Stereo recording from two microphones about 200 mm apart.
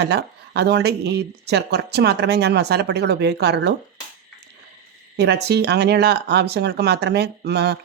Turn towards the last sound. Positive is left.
turn(degrees=-55)  # may be behind; listen again after turning